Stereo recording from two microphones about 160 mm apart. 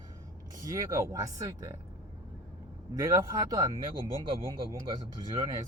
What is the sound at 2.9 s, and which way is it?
Speech, 20° right (ahead or behind).